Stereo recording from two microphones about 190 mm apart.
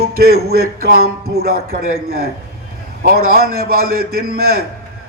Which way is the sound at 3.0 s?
50° right (ahead or behind).